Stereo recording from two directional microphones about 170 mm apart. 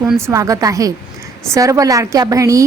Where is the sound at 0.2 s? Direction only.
15° right (ahead or behind).